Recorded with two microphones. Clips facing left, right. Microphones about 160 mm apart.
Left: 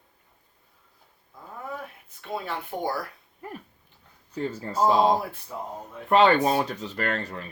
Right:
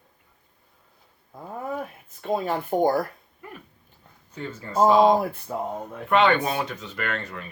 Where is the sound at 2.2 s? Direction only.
45° right (ahead or behind).